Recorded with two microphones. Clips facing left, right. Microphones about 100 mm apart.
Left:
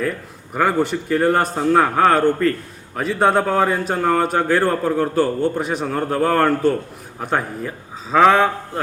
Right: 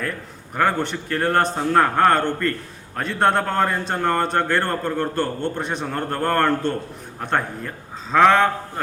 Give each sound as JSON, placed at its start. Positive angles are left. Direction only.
{"t": 0.5, "sound": "a man's voice", "side_deg": 5}